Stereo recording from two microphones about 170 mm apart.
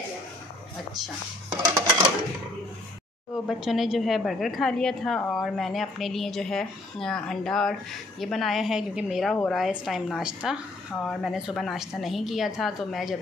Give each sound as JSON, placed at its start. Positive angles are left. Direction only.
{"t": 1.5, "sound": "dishes", "side_deg": -20}
{"t": 3.4, "sound": "a woman's voice", "side_deg": 0}